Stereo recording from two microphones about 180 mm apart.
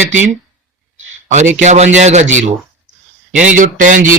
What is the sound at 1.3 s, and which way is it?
A man's voice, 40° right (ahead or behind).